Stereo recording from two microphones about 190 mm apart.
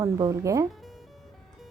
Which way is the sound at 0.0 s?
15° right (ahead or behind).